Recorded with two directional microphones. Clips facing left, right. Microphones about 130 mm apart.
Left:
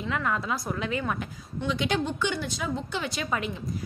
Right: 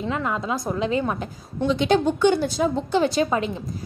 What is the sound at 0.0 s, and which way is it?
A woman's voice, 25° right (ahead or behind).